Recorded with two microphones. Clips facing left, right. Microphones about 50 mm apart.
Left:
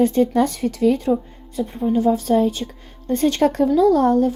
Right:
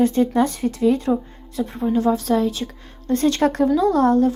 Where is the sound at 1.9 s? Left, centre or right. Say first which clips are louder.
Left 2 dB; right.